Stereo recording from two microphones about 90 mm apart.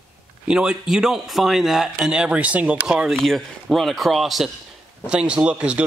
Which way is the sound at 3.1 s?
5° left (ahead or behind).